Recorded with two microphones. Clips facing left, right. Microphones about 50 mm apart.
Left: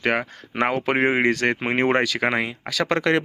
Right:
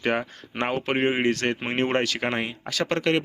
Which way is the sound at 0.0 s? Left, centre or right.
Left.